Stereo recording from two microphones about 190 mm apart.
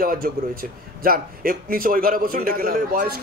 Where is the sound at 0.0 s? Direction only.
50° right (ahead or behind).